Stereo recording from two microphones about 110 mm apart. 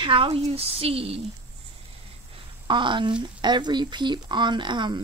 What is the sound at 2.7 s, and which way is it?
Speech, 45° right (ahead or behind).